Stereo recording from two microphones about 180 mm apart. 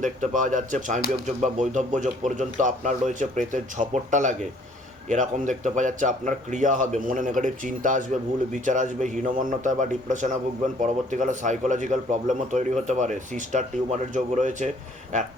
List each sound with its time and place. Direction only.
0.0 s a man's voice: 45° right (ahead or behind)